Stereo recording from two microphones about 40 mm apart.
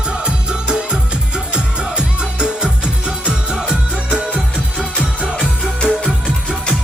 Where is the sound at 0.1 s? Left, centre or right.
Right.